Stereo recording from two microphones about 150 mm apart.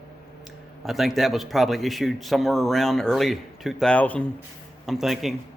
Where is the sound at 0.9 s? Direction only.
Centre (ahead or behind).